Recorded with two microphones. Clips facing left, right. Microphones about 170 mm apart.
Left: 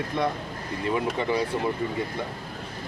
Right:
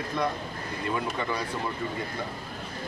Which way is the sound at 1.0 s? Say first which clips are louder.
Left 6 dB; 25° left (ahead or behind).